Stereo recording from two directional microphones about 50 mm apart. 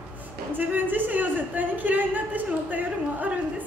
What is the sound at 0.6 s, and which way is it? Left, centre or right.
A man's voice, right.